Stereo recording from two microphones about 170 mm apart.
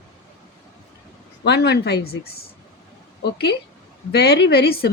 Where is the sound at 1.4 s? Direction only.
85° left.